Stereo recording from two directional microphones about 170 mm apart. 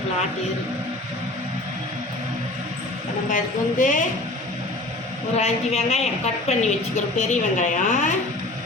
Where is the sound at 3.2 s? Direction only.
50° left (ahead or behind).